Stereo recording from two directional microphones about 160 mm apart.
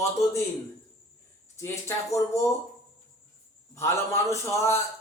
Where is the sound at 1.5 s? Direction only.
20° left (ahead or behind).